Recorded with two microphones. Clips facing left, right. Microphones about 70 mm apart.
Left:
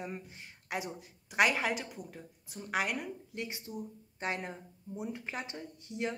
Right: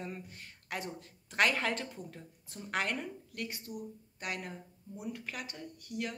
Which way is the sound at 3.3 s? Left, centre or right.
Left.